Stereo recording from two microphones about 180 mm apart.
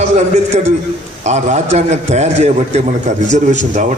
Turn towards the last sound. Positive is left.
turn(degrees=-40)  # may be behind; listen again after turning